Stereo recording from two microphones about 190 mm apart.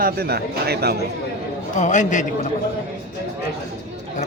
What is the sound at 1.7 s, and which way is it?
Speech, 40° left (ahead or behind).